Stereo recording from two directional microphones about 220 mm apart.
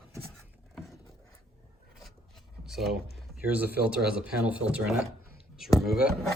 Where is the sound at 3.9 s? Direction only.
5° right (ahead or behind).